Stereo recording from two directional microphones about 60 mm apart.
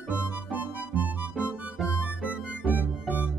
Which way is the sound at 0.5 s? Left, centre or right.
Right.